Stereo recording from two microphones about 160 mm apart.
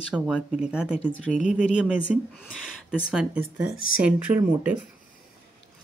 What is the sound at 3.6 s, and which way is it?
Speech, 80° left.